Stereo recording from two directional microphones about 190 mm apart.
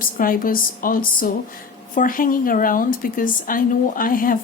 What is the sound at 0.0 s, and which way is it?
A woman's voice, 45° left (ahead or behind).